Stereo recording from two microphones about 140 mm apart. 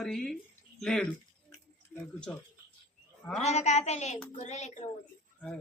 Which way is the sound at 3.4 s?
55° left (ahead or behind).